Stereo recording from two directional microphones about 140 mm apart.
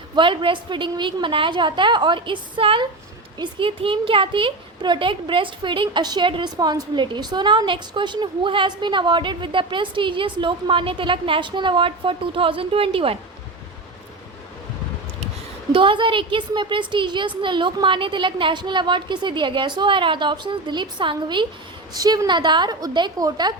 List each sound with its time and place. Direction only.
0.2 s speech: 35° right (ahead or behind)
15.7 s a woman's voice: 35° right (ahead or behind)